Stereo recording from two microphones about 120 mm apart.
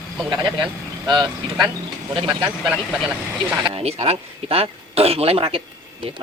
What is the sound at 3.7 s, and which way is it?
A woman's voice, 50° right (ahead or behind).